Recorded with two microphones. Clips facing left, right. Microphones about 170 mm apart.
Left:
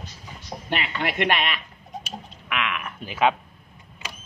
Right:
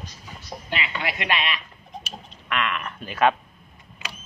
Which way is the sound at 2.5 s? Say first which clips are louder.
Right 2 dB; 5° left (ahead or behind).